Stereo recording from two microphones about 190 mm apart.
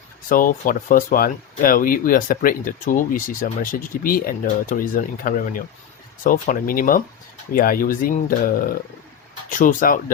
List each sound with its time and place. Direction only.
0.3 s speech: 45° left (ahead or behind)
9.5 s speech: 45° left (ahead or behind)